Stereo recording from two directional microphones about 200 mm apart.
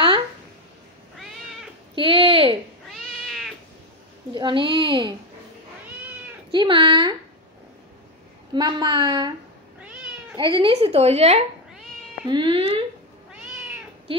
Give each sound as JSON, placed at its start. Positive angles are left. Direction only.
{"t": 1.1, "sound": "cat", "side_deg": 0}
{"t": 2.0, "sound": "a sound", "side_deg": -25}
{"t": 2.9, "sound": "cat", "side_deg": 0}
{"t": 4.3, "sound": "a child's voice", "side_deg": -25}
{"t": 6.5, "sound": "a child's voice", "side_deg": -25}
{"t": 8.5, "sound": "a child's voice", "side_deg": -20}
{"t": 10.3, "sound": "a woman's voice", "side_deg": -25}